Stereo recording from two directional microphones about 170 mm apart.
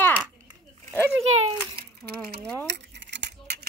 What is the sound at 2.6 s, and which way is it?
Keys jangling, 90° right.